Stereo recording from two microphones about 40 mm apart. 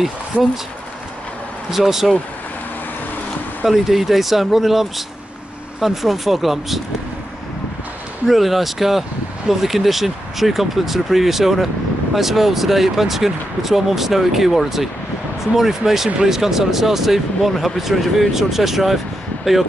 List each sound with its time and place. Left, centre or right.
0.3 s speech: right
1.7 s speech: centre
3.6 s speech: centre
8.3 s speech: centre